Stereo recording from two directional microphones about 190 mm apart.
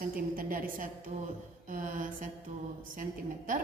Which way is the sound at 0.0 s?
50° right (ahead or behind).